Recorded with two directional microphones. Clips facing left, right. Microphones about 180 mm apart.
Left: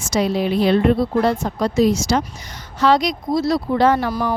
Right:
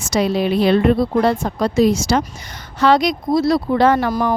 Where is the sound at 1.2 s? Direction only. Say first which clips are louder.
Right 2 dB; 60° right (ahead or behind).